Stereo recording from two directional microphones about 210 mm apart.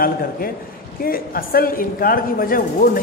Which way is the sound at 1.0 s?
45° left (ahead or behind).